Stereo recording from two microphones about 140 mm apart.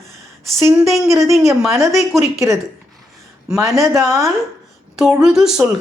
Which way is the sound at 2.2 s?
20° right (ahead or behind).